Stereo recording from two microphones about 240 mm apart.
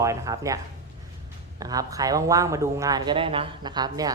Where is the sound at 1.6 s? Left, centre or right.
Centre.